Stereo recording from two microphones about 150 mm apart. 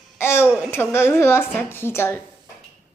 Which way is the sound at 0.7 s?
15° left (ahead or behind).